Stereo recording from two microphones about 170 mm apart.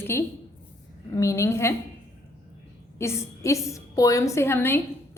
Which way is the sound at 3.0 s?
15° left (ahead or behind).